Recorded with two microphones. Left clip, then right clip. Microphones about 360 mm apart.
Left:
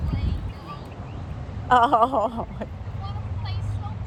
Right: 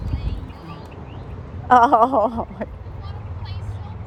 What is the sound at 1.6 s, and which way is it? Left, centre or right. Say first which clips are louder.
Speech: right 4 dB; right.